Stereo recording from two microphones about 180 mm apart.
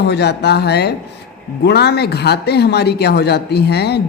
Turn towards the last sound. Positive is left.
turn(degrees=65)  # may be behind; listen again after turning